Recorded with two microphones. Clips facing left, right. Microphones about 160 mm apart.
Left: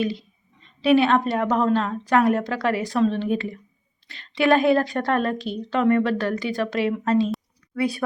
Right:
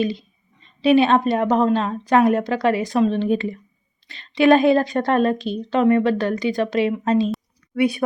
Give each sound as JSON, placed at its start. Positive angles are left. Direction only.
{"t": 0.0, "sound": "a woman's voice", "side_deg": -20}